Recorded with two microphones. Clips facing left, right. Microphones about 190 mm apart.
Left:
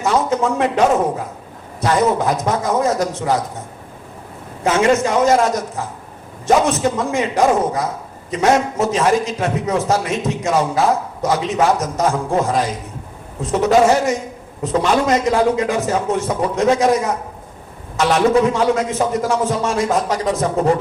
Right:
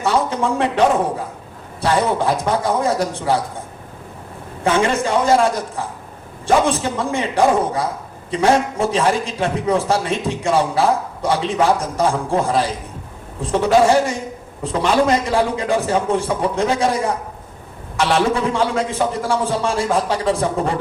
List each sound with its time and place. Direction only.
0.0 s a sound: 30° right (ahead or behind)
1.8 s a man's voice: 30° right (ahead or behind)
4.6 s a man's voice: 30° right (ahead or behind)
18.0 s a man's voice: 30° right (ahead or behind)